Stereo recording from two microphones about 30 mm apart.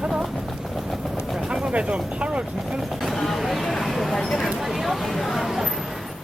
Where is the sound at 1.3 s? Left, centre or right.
Right.